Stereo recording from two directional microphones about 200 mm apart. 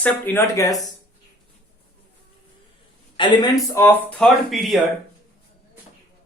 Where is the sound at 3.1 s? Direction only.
25° left (ahead or behind).